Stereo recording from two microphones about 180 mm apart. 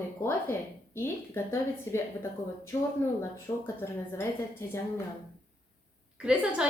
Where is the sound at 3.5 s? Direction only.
20° left (ahead or behind).